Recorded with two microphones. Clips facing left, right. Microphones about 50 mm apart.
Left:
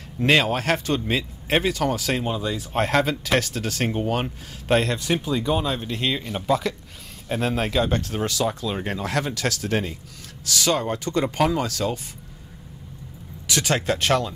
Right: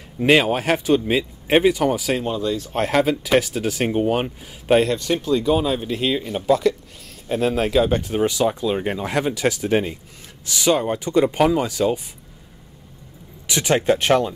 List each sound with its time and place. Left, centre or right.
0.2 s speech: centre
2.3 s speech: centre
4.8 s speech: centre
5.4 s speech: centre
13.5 s speech: centre